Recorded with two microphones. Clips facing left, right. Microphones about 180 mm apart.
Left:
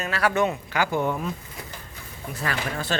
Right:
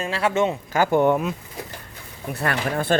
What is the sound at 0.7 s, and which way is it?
Speech, 50° right (ahead or behind).